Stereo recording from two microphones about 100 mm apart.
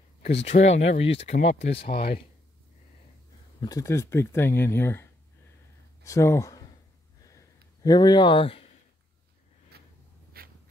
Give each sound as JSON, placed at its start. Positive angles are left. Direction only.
{"t": 0.3, "sound": "speech", "side_deg": 90}
{"t": 3.6, "sound": "speech", "side_deg": 35}
{"t": 6.0, "sound": "speech", "side_deg": 30}
{"t": 7.2, "sound": "a sound", "side_deg": 35}